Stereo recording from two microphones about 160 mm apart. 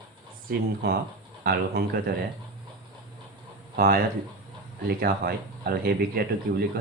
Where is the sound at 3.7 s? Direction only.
65° right (ahead or behind).